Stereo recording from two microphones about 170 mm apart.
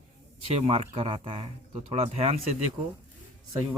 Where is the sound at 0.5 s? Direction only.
40° right (ahead or behind).